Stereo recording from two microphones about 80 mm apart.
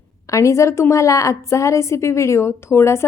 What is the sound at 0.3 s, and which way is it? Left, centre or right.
A woman's voice, left.